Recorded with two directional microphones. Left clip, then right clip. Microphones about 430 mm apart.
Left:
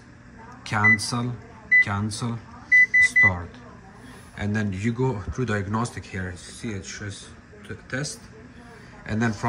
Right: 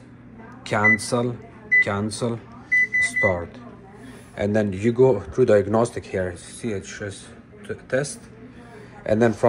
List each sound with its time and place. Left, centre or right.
0.7 s speech: centre
3.0 s microwave oven: centre
4.4 s speech: centre